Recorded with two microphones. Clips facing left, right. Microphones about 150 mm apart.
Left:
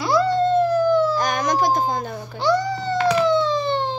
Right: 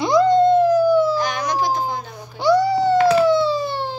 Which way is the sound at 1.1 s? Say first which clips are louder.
Left 1 dB; 50° left (ahead or behind).